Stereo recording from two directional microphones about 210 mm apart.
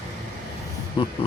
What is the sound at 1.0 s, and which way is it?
Speech, 20° left (ahead or behind).